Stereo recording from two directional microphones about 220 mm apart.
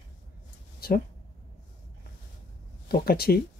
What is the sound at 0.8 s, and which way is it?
Speech, 45° left (ahead or behind).